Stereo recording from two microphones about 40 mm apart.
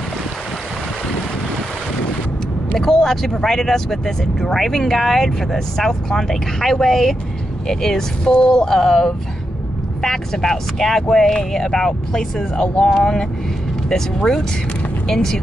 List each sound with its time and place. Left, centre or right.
2.8 s speech: centre